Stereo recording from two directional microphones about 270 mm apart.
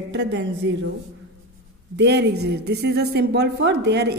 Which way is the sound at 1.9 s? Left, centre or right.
Right.